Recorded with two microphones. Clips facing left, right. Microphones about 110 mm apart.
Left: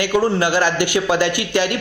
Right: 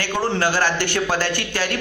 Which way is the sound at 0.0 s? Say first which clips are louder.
Left 4 dB; 15° left (ahead or behind).